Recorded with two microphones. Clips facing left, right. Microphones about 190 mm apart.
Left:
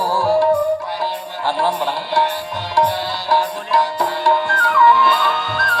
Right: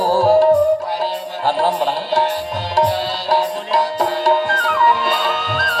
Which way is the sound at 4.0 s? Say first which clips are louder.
Right 2 dB; 35° right (ahead or behind).